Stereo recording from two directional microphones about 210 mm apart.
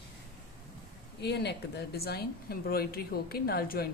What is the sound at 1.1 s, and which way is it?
Speech, 55° left (ahead or behind).